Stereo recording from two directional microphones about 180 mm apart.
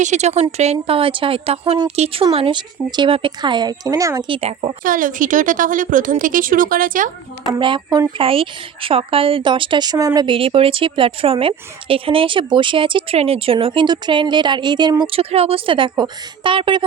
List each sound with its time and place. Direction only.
0.0 s a woman's voice: 40° right (ahead or behind); by 4.2 s 20° right (ahead or behind)
4.3 s a woman's voice: 30° right (ahead or behind)
4.8 s a woman's voice: 50° right (ahead or behind)
7.6 s a woman's voice: 25° right (ahead or behind)